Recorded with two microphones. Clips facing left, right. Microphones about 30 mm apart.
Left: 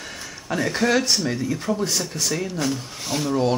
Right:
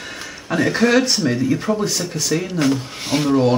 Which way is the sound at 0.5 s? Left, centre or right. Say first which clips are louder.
Right 5 dB; right.